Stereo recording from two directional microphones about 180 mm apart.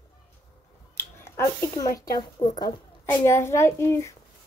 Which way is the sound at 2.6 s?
25° left (ahead or behind).